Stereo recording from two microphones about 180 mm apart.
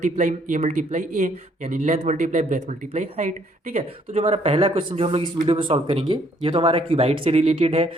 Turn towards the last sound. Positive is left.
turn(degrees=-35)  # may be behind; listen again after turning